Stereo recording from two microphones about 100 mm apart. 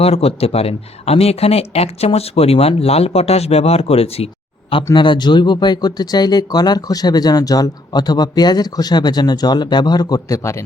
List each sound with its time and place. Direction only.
0.0 s speech: 85° left
4.9 s speech: 50° left (ahead or behind); by 10.6 s 30° left (ahead or behind)